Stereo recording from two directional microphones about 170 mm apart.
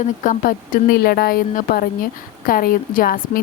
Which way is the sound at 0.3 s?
55° left (ahead or behind).